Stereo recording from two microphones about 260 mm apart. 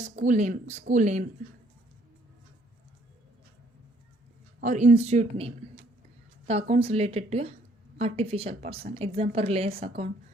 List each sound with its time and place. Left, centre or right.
0.2 s speech: right
4.6 s speech: right